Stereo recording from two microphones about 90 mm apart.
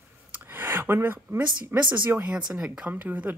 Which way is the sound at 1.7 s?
20° right (ahead or behind).